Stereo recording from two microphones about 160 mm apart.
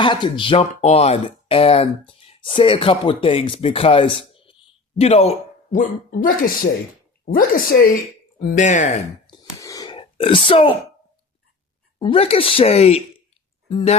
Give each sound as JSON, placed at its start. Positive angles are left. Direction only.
{"t": 0.0, "sound": "speech", "side_deg": 30}
{"t": 5.7, "sound": "a woman's voice", "side_deg": 60}
{"t": 8.4, "sound": "speech", "side_deg": 55}
{"t": 9.6, "sound": "a sound", "side_deg": 20}
{"t": 11.9, "sound": "speech", "side_deg": 35}